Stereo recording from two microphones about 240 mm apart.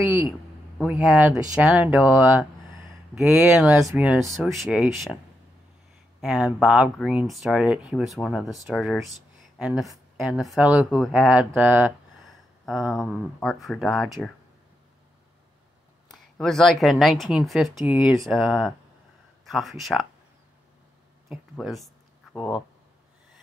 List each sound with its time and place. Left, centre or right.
0.0 s a man's voice: centre
6.2 s speech: centre
16.1 s speech: centre
21.3 s a sound: centre